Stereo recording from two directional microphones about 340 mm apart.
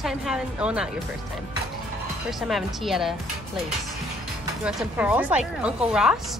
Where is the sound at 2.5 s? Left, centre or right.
Centre.